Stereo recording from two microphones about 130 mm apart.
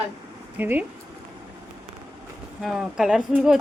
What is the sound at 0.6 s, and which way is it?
Speech, 15° right (ahead or behind).